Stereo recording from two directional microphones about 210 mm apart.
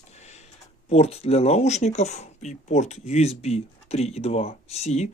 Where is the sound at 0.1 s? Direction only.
30° left (ahead or behind).